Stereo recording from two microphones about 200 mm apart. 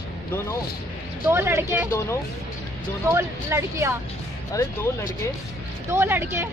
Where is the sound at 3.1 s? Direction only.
15° right (ahead or behind).